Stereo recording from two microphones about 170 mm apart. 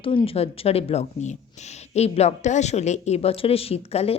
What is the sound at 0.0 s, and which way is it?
A woman's voice, 30° left (ahead or behind).